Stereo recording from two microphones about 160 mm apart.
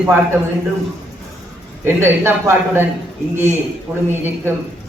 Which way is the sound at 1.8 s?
15° right (ahead or behind).